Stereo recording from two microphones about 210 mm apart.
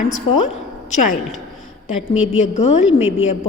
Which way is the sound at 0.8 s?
35° left (ahead or behind).